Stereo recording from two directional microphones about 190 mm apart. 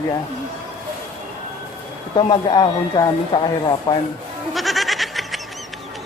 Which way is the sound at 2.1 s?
25° left (ahead or behind).